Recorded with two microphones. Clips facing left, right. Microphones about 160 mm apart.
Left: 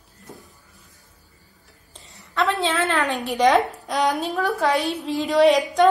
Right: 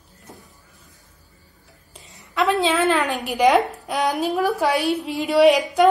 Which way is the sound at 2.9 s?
Centre (ahead or behind).